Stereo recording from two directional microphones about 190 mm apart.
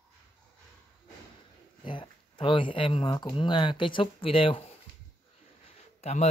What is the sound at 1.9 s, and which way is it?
Speech, 25° left (ahead or behind).